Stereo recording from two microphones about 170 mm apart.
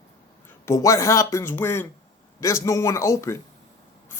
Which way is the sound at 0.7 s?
20° left (ahead or behind).